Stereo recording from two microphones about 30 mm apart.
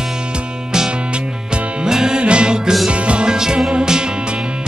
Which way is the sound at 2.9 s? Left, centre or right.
Right.